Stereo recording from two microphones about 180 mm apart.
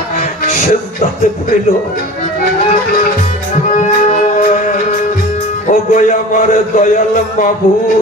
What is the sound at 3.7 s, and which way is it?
Music, 45° left (ahead or behind).